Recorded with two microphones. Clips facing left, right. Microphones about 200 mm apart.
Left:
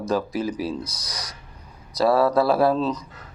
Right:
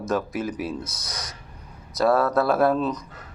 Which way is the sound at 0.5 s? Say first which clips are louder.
Left 2 dB; 30° left (ahead or behind).